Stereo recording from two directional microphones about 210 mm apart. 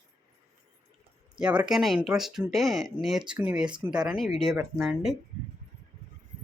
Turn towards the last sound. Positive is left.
turn(degrees=0)  # may be behind; listen again after turning